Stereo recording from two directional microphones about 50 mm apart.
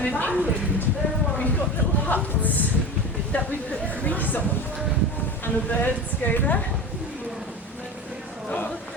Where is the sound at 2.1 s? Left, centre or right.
Left.